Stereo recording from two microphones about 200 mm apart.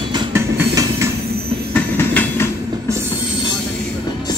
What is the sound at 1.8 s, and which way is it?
Train, 10° left (ahead or behind).